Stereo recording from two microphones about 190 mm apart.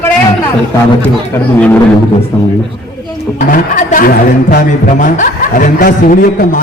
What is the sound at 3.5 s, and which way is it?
Speech, 45° left (ahead or behind).